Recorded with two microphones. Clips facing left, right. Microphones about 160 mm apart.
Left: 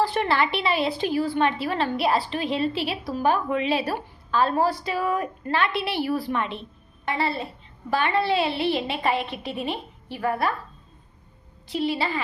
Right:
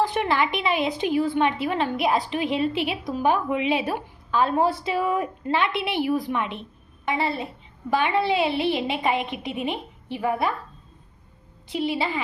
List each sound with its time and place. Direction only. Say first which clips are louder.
0.0 s a woman's voice: even; 15° right (ahead or behind)
11.7 s a woman's voice: even; 15° right (ahead or behind)